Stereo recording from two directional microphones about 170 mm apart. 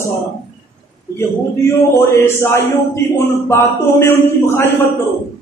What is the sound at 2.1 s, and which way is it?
A man's voice, 15° left (ahead or behind).